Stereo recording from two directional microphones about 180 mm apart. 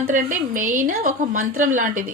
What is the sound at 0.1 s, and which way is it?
A woman's voice, 45° right (ahead or behind).